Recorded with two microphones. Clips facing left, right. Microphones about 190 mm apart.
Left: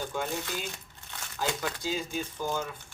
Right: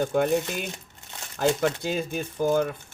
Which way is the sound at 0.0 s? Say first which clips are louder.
Right 10 dB; 60° right (ahead or behind).